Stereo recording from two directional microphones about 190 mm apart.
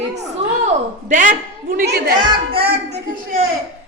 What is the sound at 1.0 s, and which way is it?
A woman's voice, 45° right (ahead or behind).